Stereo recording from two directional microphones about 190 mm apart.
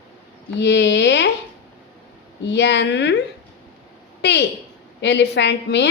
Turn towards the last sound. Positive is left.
turn(degrees=65)  # may be behind; listen again after turning